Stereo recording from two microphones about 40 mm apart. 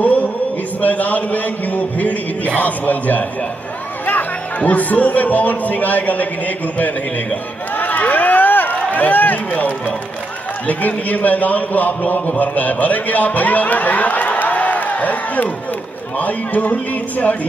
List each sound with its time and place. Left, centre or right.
0.7 s a man's voice: left
7.7 s a sound: left
10.7 s a man's voice: left
16.2 s music: left